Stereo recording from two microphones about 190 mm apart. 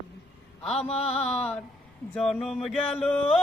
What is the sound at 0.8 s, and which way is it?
Music, 35° left (ahead or behind).